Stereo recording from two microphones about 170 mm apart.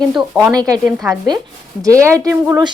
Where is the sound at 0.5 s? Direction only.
20° right (ahead or behind).